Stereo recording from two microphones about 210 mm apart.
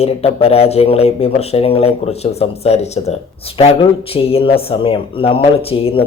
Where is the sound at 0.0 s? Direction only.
30° left (ahead or behind).